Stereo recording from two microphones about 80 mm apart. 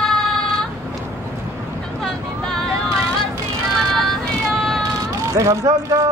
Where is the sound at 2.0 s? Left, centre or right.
Centre.